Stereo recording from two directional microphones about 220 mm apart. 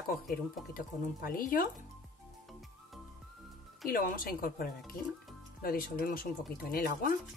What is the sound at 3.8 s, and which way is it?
Speech, 40° left (ahead or behind).